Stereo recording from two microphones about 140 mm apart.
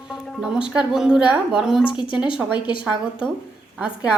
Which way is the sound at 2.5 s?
35° left (ahead or behind).